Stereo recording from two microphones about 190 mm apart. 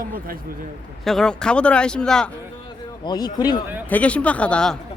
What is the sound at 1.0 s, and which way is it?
A man's voice, centre (ahead or behind).